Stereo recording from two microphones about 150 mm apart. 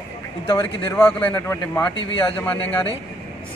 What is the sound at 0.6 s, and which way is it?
A man's voice, 10° left (ahead or behind).